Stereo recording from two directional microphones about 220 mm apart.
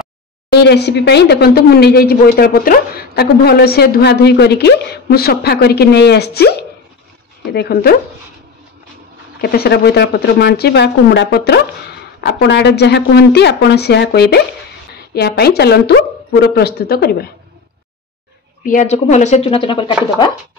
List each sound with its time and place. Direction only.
0.5 s speech: 50° left (ahead or behind)
7.5 s speech: 45° left (ahead or behind)
9.4 s speech: 45° left (ahead or behind)
18.6 s speech: 35° left (ahead or behind)